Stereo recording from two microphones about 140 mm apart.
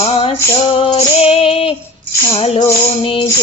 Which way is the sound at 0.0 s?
40° left (ahead or behind).